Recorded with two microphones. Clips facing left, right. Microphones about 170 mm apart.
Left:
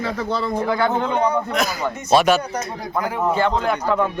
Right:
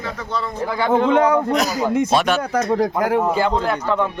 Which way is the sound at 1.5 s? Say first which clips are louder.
Right 3 dB; 40° right (ahead or behind).